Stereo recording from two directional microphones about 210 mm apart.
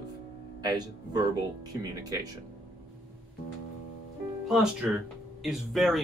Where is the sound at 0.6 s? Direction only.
20° right (ahead or behind).